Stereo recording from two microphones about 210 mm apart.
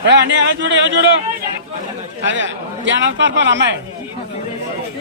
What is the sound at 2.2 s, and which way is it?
A man's voice, 60° right (ahead or behind).